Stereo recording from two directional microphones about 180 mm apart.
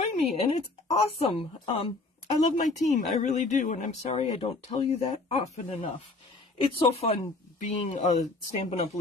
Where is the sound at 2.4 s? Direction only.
40° left (ahead or behind).